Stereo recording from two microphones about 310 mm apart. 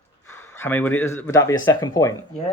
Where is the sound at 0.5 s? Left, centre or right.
Centre.